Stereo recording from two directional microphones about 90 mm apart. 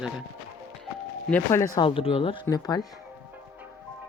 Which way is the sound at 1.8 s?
90° left.